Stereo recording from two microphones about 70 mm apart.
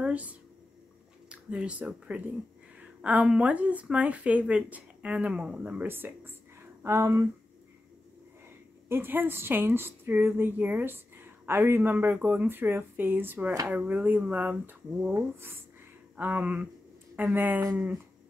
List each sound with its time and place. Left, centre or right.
0.0 s a sound: right
1.3 s a woman's voice: centre
5.9 s a woman's voice: right
8.8 s a woman's voice: right